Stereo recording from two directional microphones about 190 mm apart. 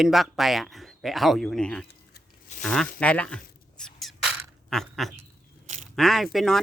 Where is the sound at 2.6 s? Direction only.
5° left (ahead or behind).